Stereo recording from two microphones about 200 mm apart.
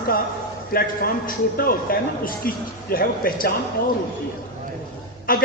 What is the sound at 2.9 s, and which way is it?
Speech, 45° left (ahead or behind).